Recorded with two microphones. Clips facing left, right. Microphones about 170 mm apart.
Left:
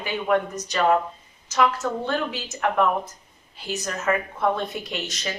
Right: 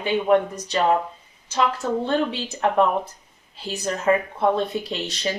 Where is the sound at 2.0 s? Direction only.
30° right (ahead or behind).